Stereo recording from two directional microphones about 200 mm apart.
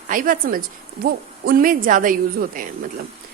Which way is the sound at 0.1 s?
45° right (ahead or behind).